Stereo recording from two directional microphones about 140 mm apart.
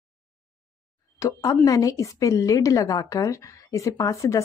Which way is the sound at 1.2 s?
25° left (ahead or behind).